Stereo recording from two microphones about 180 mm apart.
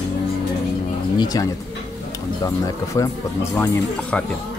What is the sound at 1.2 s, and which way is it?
Speech, 20° left (ahead or behind).